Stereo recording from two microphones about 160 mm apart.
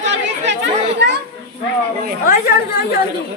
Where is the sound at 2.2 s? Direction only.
70° left (ahead or behind).